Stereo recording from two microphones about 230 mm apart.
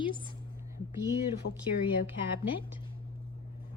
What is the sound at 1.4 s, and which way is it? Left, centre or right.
Speech, left.